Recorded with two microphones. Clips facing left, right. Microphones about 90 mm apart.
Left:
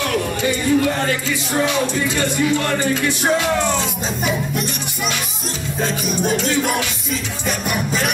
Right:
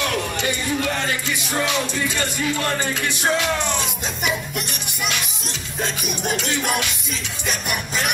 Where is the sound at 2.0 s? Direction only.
20° left (ahead or behind).